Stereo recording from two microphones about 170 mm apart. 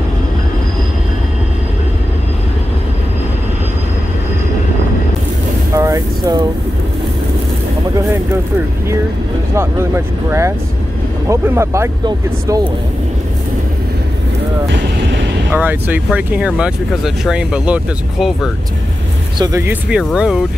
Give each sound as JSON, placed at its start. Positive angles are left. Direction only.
{"t": 5.8, "sound": "vehicle", "side_deg": -20}
{"t": 9.6, "sound": "speech", "side_deg": -15}
{"t": 14.7, "sound": "vehicle", "side_deg": -90}
{"t": 15.5, "sound": "speech", "side_deg": -10}
{"t": 19.3, "sound": "speech", "side_deg": -20}
{"t": 20.0, "sound": "speech", "side_deg": 0}